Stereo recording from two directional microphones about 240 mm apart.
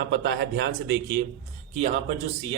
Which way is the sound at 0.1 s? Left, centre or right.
Right.